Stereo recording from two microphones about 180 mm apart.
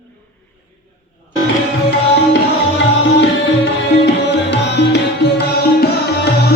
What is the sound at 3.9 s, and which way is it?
Music, 70° left (ahead or behind).